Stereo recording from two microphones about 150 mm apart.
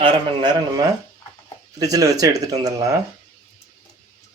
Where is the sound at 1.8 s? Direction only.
25° right (ahead or behind).